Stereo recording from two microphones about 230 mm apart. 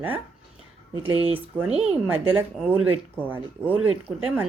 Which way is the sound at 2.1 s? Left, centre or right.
Centre.